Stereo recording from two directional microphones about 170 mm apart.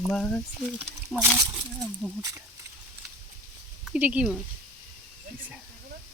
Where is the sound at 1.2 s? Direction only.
10° right (ahead or behind).